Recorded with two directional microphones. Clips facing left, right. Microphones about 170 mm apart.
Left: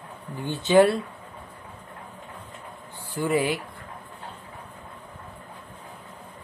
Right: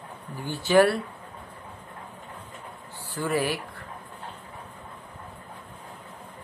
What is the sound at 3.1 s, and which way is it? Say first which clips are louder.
Speech: left 3 dB; 20° left (ahead or behind).